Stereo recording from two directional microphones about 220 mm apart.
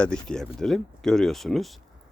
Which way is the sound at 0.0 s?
5° left (ahead or behind).